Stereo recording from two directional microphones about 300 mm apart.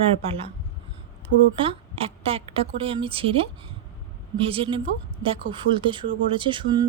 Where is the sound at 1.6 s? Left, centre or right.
Centre.